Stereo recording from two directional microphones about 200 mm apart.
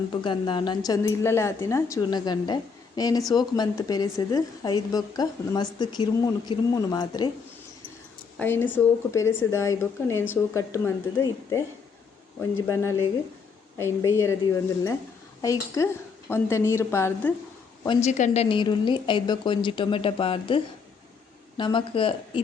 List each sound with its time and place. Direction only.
0.1 s a woman's voice: 25° left (ahead or behind)
8.4 s a woman's voice: 10° left (ahead or behind)
15.4 s a woman's voice: 15° left (ahead or behind)
17.8 s a woman's voice: 35° left (ahead or behind)
21.6 s a woman's voice: 25° left (ahead or behind)